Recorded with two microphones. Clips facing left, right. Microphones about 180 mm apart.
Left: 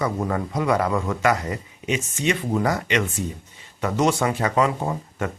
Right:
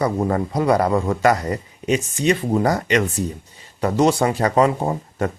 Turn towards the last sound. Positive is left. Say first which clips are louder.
# right 4 dB
turn(degrees=-35)  # may be behind; listen again after turning